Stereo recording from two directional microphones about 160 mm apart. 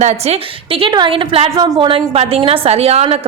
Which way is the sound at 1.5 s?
25° right (ahead or behind).